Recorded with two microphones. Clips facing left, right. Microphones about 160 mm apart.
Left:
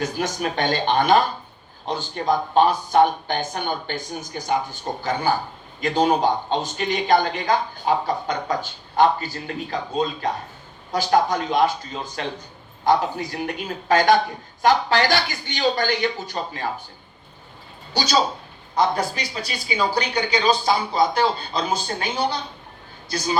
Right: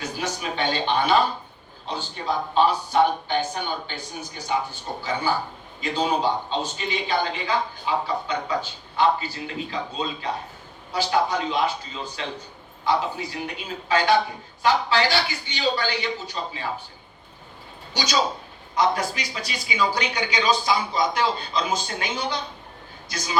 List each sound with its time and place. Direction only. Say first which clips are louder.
0.0 s speech: left 5 dB; 45° left (ahead or behind)
17.9 s speech: left 3 dB; 30° left (ahead or behind)
23.1 s speech: left 4 dB; 35° left (ahead or behind)